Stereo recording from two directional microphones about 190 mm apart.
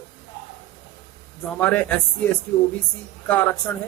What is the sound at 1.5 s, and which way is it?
A man's voice, 10° left (ahead or behind).